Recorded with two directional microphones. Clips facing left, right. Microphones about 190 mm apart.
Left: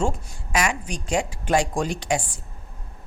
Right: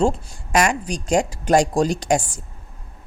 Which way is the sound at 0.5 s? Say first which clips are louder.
Right 5 dB; 40° right (ahead or behind).